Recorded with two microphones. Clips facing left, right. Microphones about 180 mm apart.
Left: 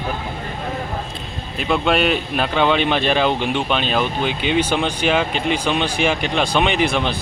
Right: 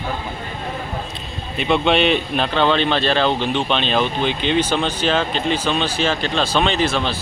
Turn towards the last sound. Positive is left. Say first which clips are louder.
# left 1 dB
turn(degrees=15)  # may be behind; listen again after turning